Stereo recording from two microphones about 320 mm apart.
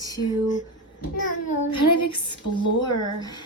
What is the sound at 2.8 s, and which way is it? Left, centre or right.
Speech, centre.